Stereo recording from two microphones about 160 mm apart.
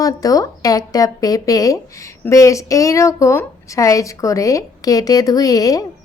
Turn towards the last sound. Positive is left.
turn(degrees=20)  # may be behind; listen again after turning